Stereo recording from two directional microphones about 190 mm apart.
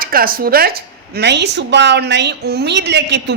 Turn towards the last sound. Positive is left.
turn(degrees=-65)  # may be behind; listen again after turning